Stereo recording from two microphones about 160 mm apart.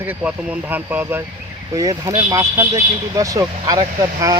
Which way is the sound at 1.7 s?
20° right (ahead or behind).